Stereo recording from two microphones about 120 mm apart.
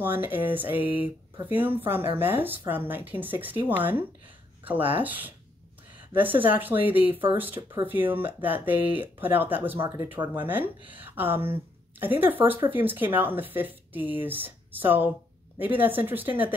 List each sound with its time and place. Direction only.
0.0 s speech: 15° right (ahead or behind)